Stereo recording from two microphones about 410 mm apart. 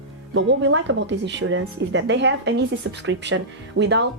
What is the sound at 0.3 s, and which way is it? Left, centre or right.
A woman's voice, right.